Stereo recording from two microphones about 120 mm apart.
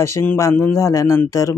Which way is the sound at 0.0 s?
20° left (ahead or behind).